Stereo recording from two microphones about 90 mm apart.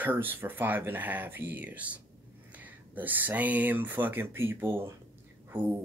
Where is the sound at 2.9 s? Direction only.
20° right (ahead or behind).